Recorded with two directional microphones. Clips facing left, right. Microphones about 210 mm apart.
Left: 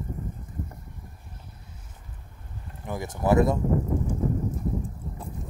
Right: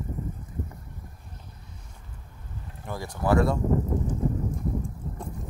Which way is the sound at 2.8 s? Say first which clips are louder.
Left 2 dB; 20° left (ahead or behind).